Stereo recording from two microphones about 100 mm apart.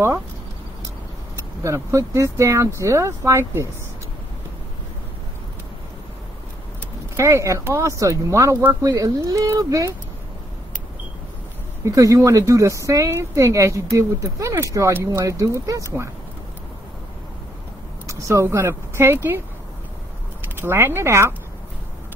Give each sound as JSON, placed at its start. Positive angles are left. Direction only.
{"t": 1.6, "sound": "speech", "side_deg": -30}
{"t": 7.2, "sound": "speech", "side_deg": -30}
{"t": 11.8, "sound": "speech", "side_deg": -35}
{"t": 18.0, "sound": "speech", "side_deg": -30}
{"t": 20.5, "sound": "speech", "side_deg": -25}